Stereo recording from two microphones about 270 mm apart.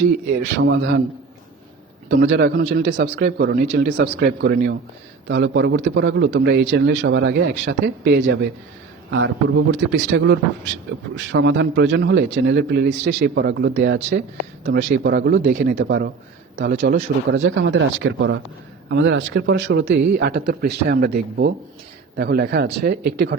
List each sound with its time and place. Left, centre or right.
0.7 s a man's voice: right
2.0 s a man's voice: right